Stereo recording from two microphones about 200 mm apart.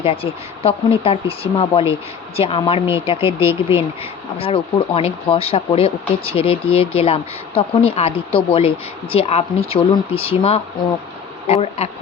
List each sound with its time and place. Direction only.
0.0 s speech: 30° left (ahead or behind)
3.4 s speech: 15° right (ahead or behind)
4.4 s speech: 30° left (ahead or behind)